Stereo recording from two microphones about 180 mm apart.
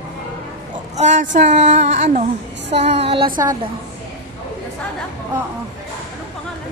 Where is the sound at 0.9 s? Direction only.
40° right (ahead or behind).